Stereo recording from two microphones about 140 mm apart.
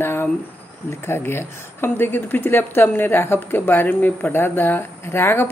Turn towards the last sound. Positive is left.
turn(degrees=15)  # may be behind; listen again after turning